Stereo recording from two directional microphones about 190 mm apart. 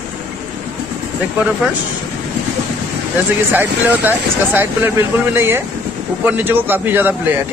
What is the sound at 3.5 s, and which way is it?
A man's voice, 10° right (ahead or behind).